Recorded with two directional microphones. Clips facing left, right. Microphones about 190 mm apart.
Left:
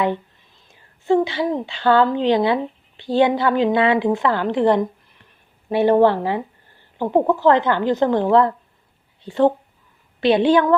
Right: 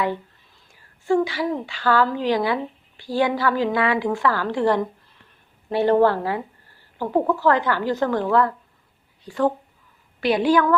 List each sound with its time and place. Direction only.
0.0 s a woman's voice: 20° left (ahead or behind)